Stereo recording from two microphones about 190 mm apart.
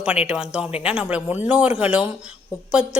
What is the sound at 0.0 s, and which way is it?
A woman's voice, 5° right (ahead or behind).